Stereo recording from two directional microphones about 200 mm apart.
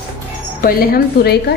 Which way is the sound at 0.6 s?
50° left (ahead or behind).